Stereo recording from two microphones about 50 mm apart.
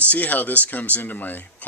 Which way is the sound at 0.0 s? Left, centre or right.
Left.